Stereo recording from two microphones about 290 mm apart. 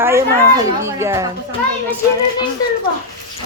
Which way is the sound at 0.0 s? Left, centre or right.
Centre.